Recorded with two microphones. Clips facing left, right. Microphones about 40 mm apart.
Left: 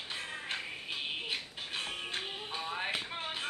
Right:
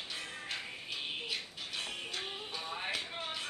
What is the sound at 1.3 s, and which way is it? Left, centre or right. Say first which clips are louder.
Music: left 2 dB; left.